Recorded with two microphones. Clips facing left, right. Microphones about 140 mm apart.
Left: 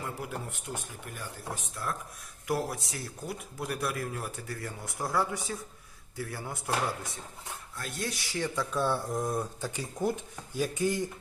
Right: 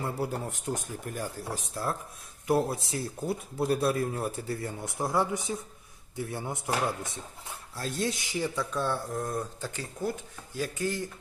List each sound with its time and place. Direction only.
0.0 s a man's voice: 35° right (ahead or behind); by 8.4 s 20° right (ahead or behind)
8.5 s speech: 10° left (ahead or behind)